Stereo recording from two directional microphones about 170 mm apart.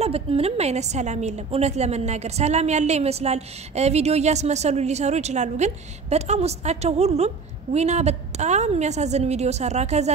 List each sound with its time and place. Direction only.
0.0 s a woman's voice: 35° right (ahead or behind)